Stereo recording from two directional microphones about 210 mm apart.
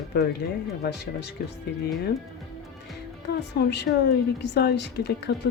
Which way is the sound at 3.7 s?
55° left (ahead or behind).